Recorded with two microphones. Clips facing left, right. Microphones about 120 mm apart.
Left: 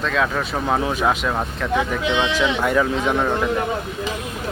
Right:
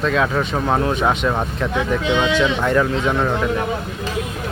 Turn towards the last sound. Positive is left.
turn(degrees=5)  # may be behind; listen again after turning